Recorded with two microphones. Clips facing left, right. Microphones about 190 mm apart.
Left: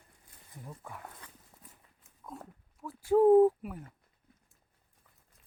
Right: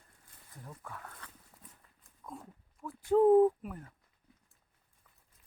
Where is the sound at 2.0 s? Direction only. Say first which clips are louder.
Even; 5° left (ahead or behind).